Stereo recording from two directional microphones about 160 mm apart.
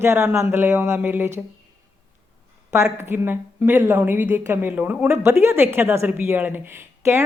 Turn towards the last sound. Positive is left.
turn(degrees=-15)  # may be behind; listen again after turning